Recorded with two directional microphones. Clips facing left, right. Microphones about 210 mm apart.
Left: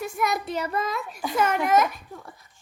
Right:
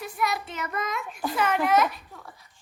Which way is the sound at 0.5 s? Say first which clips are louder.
Left 4 dB; 30° left (ahead or behind).